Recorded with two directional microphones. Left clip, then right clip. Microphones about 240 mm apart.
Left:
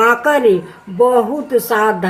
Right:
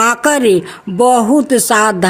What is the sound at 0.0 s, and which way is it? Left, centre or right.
Speech, right.